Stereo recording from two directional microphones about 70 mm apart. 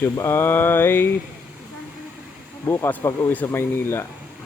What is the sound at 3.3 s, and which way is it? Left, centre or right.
Mantra, left.